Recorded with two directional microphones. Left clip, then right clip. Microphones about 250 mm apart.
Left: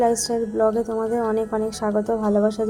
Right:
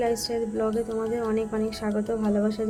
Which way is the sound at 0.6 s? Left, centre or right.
Centre.